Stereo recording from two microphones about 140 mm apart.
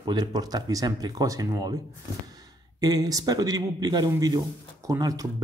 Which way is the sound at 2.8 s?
25° right (ahead or behind).